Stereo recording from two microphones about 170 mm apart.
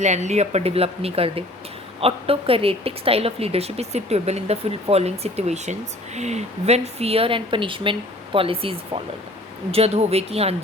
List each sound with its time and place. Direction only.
0.0 s speech: 45° right (ahead or behind)